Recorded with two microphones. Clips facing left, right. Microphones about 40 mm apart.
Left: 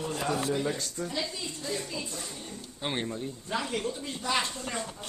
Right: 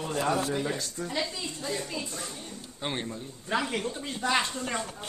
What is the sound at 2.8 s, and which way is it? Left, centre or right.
Speech, centre.